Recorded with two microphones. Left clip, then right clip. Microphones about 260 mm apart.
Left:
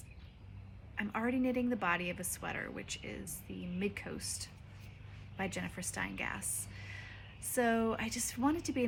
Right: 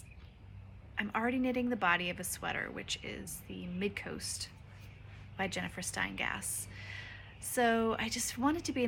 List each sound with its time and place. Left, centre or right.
0.9 s speech: centre